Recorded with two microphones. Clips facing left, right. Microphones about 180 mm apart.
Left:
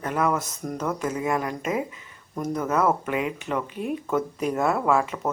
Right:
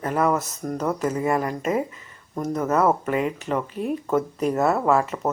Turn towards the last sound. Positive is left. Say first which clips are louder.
# right 2 dB
turn(degrees=0)  # may be behind; listen again after turning